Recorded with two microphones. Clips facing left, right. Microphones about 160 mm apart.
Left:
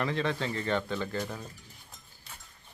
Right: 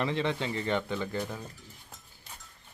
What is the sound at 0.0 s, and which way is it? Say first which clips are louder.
Speech: even; 20° right (ahead or behind).